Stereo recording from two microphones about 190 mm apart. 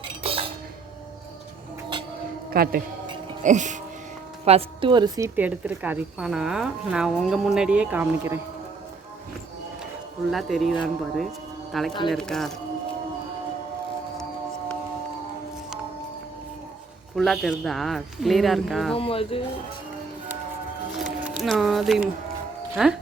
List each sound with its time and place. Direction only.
0.0 s dishes: 30° right (ahead or behind)
2.5 s speech: 50° right (ahead or behind)
3.4 s speech: 40° right (ahead or behind)
4.4 s speech: 30° right (ahead or behind); by 8.4 s 10° right (ahead or behind)
10.3 s speech: centre (ahead or behind)
17.2 s speech: centre (ahead or behind)
18.9 s speech: 30° left (ahead or behind)
20.9 s music: centre (ahead or behind)
22.7 s speech: 5° right (ahead or behind)